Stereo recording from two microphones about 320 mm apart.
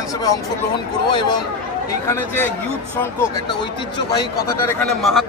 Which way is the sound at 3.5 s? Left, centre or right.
Left.